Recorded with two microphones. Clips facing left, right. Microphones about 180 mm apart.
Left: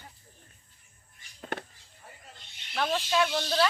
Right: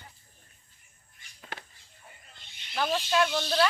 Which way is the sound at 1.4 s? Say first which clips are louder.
Left 7 dB; 50° left (ahead or behind).